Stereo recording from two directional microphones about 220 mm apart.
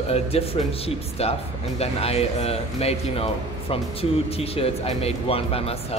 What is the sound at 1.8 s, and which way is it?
Speech, 25° left (ahead or behind).